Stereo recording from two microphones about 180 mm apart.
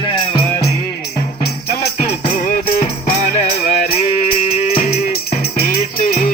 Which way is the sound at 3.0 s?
55° left (ahead or behind).